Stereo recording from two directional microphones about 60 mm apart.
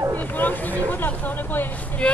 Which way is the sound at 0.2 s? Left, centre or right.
Left.